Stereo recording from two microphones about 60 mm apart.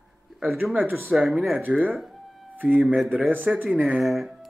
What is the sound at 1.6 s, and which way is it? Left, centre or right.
Speech, right.